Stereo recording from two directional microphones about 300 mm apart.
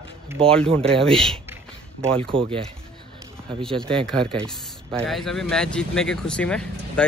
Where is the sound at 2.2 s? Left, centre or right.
Centre.